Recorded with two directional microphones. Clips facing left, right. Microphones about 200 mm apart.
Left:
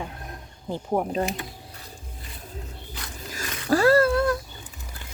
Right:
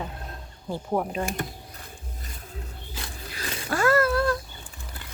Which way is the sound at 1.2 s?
50° right (ahead or behind).